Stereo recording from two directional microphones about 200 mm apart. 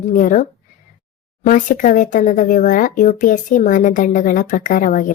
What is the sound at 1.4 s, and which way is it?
Speech, 40° left (ahead or behind).